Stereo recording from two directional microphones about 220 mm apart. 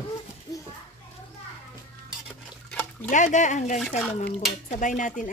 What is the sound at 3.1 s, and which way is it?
Speech, 35° left (ahead or behind).